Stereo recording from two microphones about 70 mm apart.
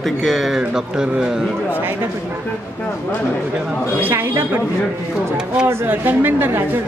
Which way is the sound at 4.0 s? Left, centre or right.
Right.